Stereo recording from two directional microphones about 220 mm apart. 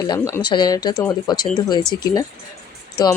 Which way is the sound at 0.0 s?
15° left (ahead or behind).